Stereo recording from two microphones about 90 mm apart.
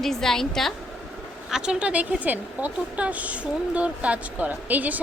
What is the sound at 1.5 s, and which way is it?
A woman's voice, 10° right (ahead or behind).